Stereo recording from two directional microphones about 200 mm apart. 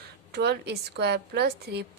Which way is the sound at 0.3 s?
55° right (ahead or behind).